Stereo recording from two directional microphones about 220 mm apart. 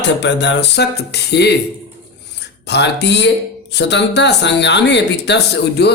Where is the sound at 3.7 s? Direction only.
50° left (ahead or behind).